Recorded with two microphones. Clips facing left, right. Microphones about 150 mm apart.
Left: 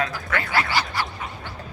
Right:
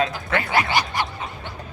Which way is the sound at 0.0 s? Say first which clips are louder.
Right 3 dB; 25° right (ahead or behind).